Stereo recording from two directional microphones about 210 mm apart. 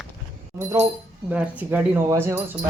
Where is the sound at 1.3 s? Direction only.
5° right (ahead or behind).